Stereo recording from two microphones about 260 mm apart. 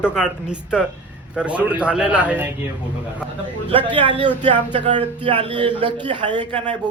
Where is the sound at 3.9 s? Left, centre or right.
Centre.